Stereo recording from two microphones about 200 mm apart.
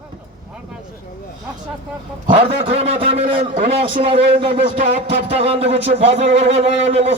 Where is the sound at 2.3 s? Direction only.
30° right (ahead or behind).